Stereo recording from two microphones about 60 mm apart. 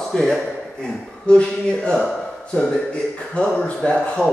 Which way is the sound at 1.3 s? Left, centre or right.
Centre.